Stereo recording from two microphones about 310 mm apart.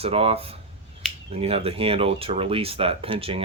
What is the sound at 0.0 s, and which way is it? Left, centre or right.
Speech, centre.